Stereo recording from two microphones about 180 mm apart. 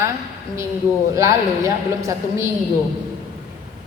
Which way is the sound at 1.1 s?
15° right (ahead or behind).